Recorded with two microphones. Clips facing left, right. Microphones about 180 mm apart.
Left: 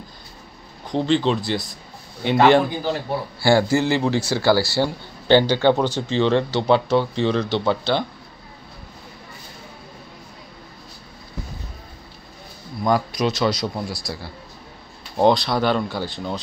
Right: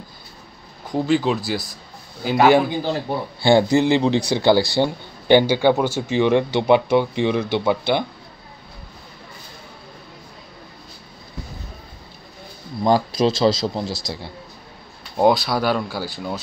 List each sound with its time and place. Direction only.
0.8 s speech: 5° right (ahead or behind)
3.3 s speech: 20° right (ahead or behind)
12.8 s a man's voice: 25° right (ahead or behind)
15.1 s speech: 5° right (ahead or behind)